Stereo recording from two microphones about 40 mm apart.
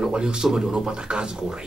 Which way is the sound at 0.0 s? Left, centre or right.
Centre.